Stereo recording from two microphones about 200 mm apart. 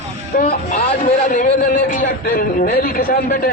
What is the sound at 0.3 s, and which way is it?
Speech, 45° left (ahead or behind).